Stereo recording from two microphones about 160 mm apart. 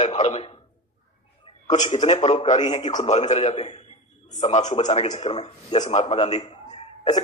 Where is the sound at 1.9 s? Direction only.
45° left (ahead or behind).